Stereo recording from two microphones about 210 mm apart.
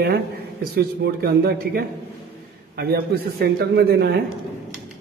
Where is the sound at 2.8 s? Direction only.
50° right (ahead or behind).